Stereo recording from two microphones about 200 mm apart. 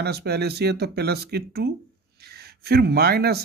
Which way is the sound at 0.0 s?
55° right (ahead or behind).